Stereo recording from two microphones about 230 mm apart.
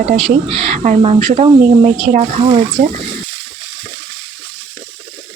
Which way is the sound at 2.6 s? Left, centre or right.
Right.